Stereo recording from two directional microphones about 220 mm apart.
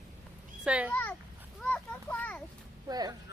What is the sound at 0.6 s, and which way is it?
Speech, 5° right (ahead or behind).